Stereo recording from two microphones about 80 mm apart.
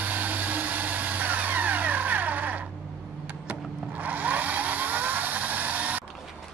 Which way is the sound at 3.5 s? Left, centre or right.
Right.